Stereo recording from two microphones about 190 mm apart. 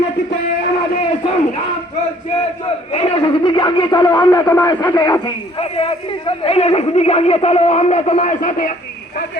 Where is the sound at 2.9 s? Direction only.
30° left (ahead or behind).